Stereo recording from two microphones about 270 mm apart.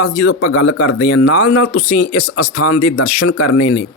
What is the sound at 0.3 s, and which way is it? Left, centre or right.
Speech, left.